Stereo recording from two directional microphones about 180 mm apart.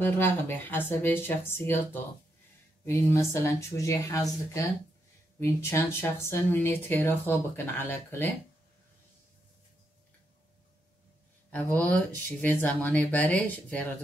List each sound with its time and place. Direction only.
0.0 s speech: 10° left (ahead or behind)
11.5 s speech: 10° left (ahead or behind)